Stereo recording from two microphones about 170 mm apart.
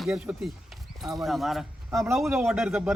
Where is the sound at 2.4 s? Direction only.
5° right (ahead or behind).